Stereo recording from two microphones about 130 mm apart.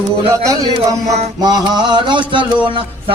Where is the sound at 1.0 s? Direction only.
60° right (ahead or behind).